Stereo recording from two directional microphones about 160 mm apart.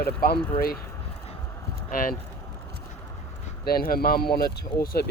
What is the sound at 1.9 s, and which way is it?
Speech, 60° left (ahead or behind).